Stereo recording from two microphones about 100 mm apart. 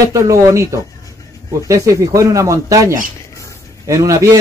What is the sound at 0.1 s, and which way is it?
Speech, 30° right (ahead or behind).